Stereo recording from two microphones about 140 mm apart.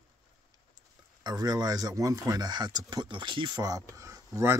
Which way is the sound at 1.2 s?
30° right (ahead or behind).